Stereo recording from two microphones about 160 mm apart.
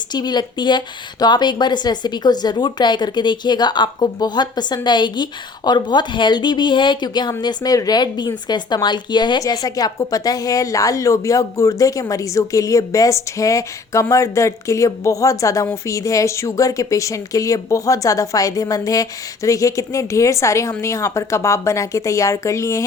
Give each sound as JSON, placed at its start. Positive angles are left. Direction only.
{"t": 0.1, "sound": "a woman's voice", "side_deg": 25}